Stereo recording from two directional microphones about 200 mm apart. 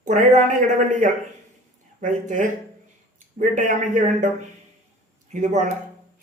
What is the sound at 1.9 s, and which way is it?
A woman's voice, 35° right (ahead or behind).